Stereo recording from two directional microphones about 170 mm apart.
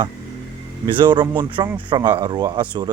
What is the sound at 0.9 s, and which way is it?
Speech, 30° right (ahead or behind).